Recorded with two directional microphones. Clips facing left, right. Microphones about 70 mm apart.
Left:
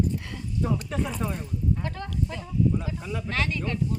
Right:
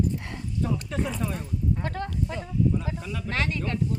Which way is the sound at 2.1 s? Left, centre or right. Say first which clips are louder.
Even; right.